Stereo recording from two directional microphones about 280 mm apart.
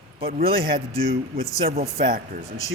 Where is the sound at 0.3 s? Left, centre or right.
Right.